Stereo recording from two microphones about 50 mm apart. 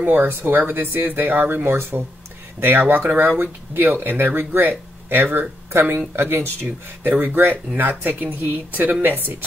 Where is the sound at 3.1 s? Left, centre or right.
Right.